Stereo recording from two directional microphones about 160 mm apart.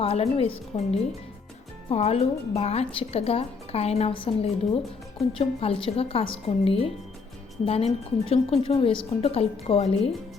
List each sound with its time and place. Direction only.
0.0 s speech: 35° left (ahead or behind)